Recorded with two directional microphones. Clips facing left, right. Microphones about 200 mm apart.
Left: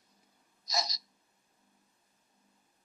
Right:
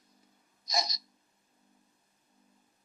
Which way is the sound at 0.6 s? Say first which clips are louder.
Right 2 dB; 15° right (ahead or behind).